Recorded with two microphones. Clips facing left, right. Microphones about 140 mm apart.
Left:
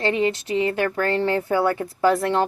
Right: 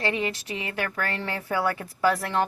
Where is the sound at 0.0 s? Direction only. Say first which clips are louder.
Left 6 dB; 25° left (ahead or behind).